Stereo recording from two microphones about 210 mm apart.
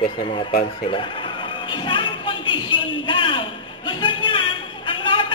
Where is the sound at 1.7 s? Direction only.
25° left (ahead or behind).